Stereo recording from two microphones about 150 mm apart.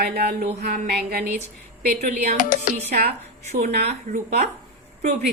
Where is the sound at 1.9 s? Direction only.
50° right (ahead or behind).